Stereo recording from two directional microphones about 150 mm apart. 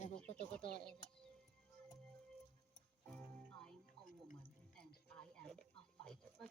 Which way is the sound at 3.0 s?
5° left (ahead or behind).